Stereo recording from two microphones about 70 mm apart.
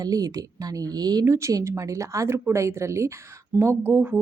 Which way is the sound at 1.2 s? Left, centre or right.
Right.